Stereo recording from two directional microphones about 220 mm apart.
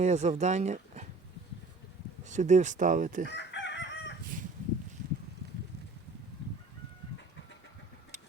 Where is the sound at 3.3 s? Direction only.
50° left (ahead or behind).